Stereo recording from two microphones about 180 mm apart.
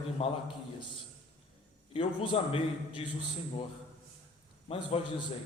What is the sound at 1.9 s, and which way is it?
A man's voice, 30° left (ahead or behind).